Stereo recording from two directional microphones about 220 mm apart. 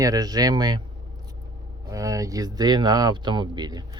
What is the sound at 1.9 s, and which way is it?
Speech, 15° right (ahead or behind).